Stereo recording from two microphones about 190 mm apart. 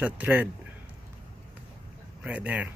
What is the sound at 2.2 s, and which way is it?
Speech, 5° right (ahead or behind).